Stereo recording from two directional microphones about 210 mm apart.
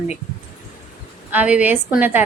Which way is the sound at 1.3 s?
5° right (ahead or behind).